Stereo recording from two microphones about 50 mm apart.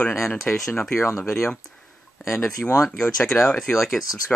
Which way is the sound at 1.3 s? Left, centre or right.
Centre.